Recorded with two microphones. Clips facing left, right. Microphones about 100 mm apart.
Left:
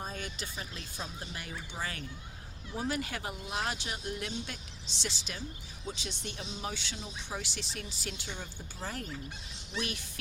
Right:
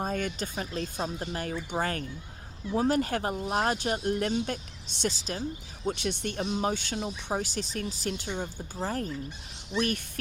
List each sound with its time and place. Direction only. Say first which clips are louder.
0.0 s speech: right 9 dB; 55° right (ahead or behind)
5.8 s speech: right 10 dB; 60° right (ahead or behind); by 9.0 s 40° right (ahead or behind)